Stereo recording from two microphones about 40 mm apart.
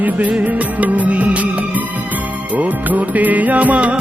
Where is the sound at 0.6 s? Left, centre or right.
Right.